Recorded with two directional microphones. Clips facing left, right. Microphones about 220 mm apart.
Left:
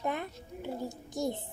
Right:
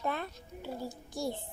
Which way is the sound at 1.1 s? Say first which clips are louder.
Left 3 dB; 20° left (ahead or behind).